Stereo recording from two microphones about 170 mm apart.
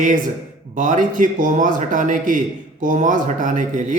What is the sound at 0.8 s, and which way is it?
Speech, 50° right (ahead or behind).